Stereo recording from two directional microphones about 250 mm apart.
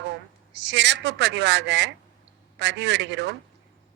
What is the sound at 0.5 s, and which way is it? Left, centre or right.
A woman's voice, right.